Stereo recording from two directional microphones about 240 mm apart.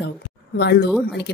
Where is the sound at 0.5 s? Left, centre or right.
Left.